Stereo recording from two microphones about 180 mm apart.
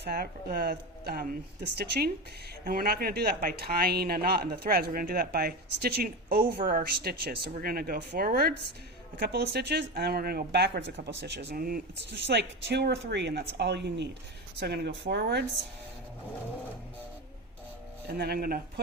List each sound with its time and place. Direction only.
0.0 s speech: 60° right (ahead or behind)
18.2 s speech: 60° right (ahead or behind)